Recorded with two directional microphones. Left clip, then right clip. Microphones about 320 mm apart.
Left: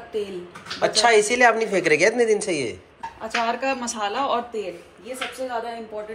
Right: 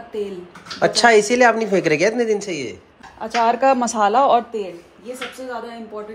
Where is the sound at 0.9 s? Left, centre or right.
Centre.